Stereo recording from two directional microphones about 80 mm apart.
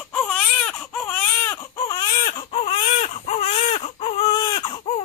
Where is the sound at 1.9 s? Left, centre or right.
Left.